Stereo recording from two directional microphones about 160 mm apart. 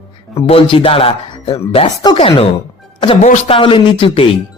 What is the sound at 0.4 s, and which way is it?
Speech, 35° left (ahead or behind).